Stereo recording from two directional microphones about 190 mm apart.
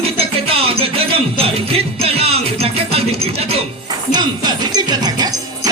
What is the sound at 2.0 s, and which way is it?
Music, 30° right (ahead or behind).